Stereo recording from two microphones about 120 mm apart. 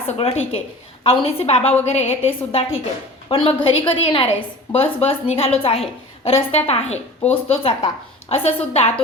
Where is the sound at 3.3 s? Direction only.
50° left (ahead or behind).